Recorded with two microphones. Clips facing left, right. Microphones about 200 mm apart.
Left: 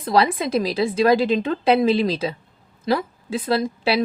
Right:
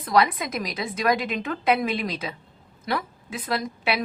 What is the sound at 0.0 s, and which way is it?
A woman's voice, 30° left (ahead or behind).